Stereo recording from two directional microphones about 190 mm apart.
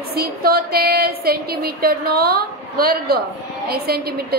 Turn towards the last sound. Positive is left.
turn(degrees=-55)  # may be behind; listen again after turning